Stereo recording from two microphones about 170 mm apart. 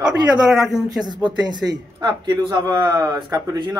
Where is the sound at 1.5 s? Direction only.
25° right (ahead or behind).